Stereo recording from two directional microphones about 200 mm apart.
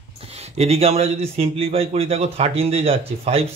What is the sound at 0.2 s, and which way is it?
Speech, 30° right (ahead or behind).